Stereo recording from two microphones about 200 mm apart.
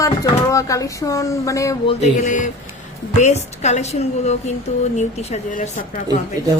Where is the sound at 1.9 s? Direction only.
35° left (ahead or behind).